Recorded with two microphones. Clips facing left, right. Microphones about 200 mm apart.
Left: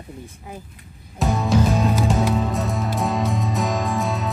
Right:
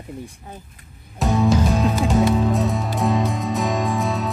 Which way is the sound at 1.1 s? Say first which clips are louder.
Right 2 dB; centre (ahead or behind).